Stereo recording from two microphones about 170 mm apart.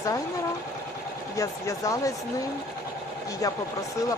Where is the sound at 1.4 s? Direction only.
20° left (ahead or behind).